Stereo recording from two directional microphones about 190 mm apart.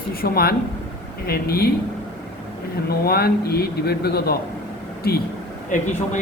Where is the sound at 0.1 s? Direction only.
55° left (ahead or behind).